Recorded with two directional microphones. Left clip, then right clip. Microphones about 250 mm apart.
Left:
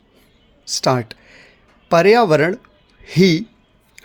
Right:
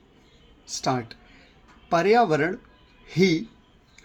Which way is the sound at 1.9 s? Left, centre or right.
Left.